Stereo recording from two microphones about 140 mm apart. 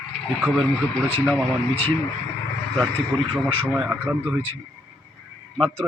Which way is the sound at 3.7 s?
10° right (ahead or behind).